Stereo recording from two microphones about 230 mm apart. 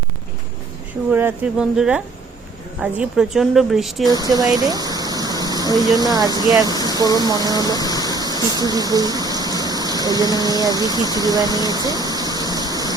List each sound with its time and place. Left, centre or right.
1.1 s a woman's voice: centre
4.0 s speech: centre
7.8 s vehicle: centre
8.1 s a sound: centre